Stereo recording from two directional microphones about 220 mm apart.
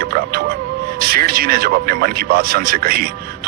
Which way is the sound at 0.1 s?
45° right (ahead or behind).